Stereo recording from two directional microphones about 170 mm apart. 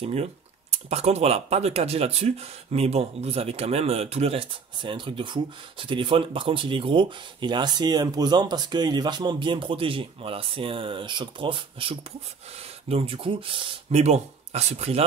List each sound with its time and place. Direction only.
0.0 s speech: 40° right (ahead or behind)